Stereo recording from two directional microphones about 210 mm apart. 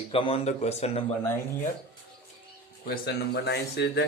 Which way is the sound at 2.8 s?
50° left (ahead or behind).